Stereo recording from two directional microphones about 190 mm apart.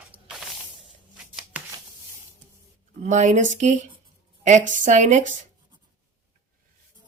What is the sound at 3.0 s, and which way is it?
Speech, 40° right (ahead or behind).